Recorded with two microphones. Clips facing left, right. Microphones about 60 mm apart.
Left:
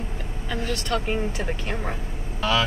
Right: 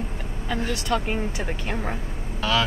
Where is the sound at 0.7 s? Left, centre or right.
Centre.